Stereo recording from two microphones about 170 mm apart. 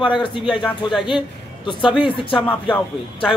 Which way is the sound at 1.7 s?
30° left (ahead or behind).